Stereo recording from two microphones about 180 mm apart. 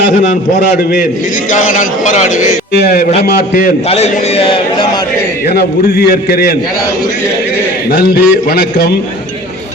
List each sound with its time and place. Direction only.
1.5 s speech: 45° left (ahead or behind)
2.8 s speech: 55° left (ahead or behind)
3.8 s a man's voice: 35° left (ahead or behind)
5.5 s a man's voice: 60° left (ahead or behind)
7.9 s a man's voice: 60° left (ahead or behind)